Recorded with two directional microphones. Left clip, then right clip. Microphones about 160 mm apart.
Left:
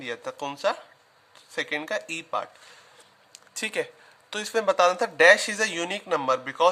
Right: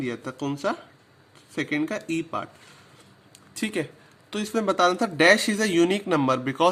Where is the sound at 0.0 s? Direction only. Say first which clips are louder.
Right 1 dB; 20° left (ahead or behind).